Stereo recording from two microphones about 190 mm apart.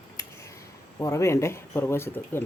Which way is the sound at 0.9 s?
15° left (ahead or behind).